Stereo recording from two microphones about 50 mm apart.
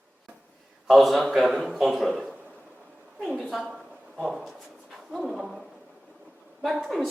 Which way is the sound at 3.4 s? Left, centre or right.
Centre.